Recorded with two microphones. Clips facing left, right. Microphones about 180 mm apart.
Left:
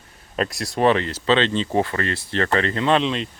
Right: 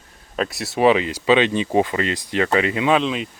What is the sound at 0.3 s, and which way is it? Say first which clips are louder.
Speech: right 1 dB; centre (ahead or behind).